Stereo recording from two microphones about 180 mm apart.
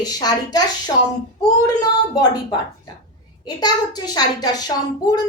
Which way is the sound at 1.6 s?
20° left (ahead or behind).